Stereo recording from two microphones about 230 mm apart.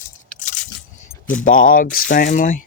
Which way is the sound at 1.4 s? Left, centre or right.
Left.